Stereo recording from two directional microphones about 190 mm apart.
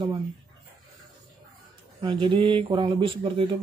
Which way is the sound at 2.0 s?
25° right (ahead or behind).